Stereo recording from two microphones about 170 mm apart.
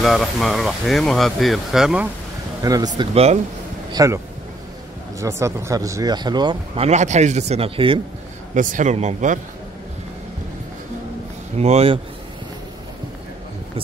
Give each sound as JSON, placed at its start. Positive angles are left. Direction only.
{"t": 0.0, "sound": "speech", "side_deg": 0}
{"t": 2.6, "sound": "speech", "side_deg": -20}
{"t": 3.0, "sound": "speech", "side_deg": -35}
{"t": 3.9, "sound": "speech", "side_deg": -20}
{"t": 5.2, "sound": "speech", "side_deg": -15}
{"t": 8.5, "sound": "speech", "side_deg": -45}
{"t": 11.5, "sound": "speech", "side_deg": -40}